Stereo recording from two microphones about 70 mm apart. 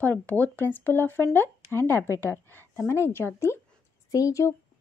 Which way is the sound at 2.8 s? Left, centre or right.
Left.